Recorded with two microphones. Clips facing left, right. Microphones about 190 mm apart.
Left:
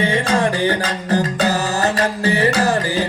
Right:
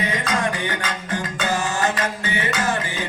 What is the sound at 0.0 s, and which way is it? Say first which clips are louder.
Music: left 6 dB; 30° left (ahead or behind).